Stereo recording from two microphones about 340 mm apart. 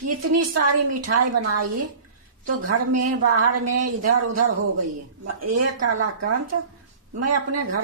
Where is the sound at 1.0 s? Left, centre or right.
Right.